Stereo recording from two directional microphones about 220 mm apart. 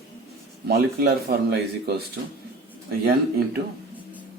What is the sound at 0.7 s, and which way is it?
Speech, 45° right (ahead or behind).